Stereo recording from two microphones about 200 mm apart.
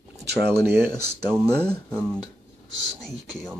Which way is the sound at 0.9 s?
10° right (ahead or behind).